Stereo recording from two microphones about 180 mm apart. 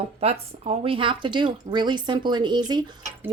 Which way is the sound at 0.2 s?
35° right (ahead or behind).